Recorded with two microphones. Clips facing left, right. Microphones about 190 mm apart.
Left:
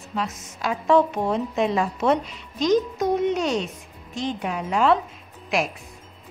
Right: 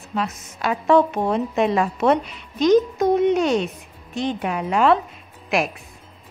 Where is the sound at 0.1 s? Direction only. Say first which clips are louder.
Right 3 dB; 60° right (ahead or behind).